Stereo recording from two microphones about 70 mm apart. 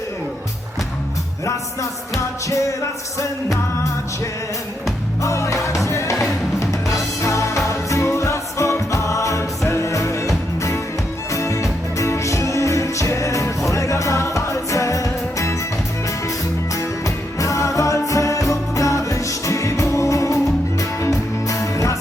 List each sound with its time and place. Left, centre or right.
2.5 s music: left
5.2 s music: left
17.4 s music: left
21.4 s music: left